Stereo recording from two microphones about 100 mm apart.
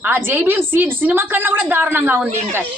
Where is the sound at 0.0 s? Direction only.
20° right (ahead or behind).